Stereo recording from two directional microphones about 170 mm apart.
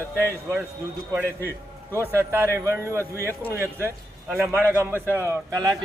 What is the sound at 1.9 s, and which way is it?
A man's voice, 15° right (ahead or behind).